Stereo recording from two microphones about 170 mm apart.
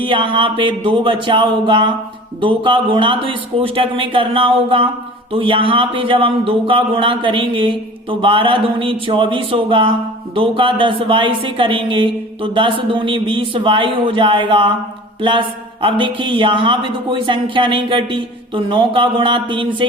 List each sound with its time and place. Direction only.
0.0 s speech: 30° right (ahead or behind)